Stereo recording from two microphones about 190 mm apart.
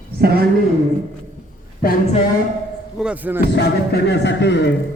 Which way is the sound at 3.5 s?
60° left (ahead or behind).